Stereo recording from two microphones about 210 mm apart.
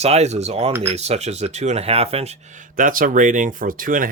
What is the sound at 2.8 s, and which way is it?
Speech, 40° right (ahead or behind).